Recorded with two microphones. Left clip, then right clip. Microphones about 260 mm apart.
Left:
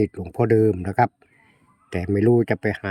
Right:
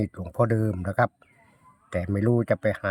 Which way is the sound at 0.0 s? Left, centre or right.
Centre.